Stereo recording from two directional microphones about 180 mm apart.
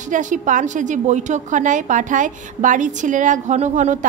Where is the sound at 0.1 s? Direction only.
45° right (ahead or behind).